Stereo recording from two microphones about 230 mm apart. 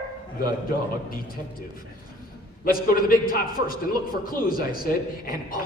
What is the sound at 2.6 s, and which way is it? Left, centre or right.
A man's voice, left.